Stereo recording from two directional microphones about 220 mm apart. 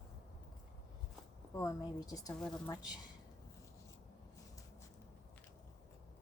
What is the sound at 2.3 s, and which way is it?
Speech, 5° left (ahead or behind).